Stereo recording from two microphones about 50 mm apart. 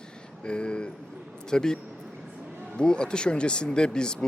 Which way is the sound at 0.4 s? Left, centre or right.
Left.